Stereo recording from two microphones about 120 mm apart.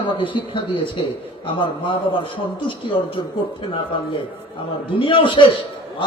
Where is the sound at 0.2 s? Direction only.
45° left (ahead or behind).